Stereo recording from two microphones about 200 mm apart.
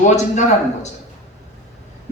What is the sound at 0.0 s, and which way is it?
Speech, 35° left (ahead or behind).